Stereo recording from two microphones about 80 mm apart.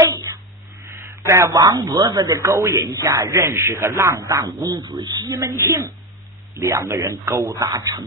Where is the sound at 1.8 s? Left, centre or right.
Right.